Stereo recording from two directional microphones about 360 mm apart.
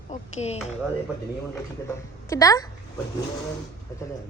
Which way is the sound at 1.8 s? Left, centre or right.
Centre.